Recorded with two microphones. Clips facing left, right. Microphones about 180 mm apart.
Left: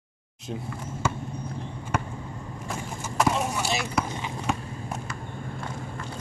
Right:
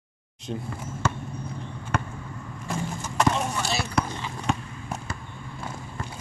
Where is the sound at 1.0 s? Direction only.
10° left (ahead or behind).